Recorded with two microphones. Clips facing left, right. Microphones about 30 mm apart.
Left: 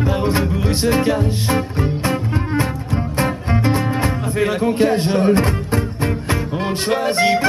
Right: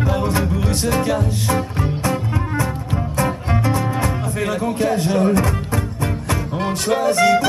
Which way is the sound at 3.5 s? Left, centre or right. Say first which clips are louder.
Left 2 dB; left.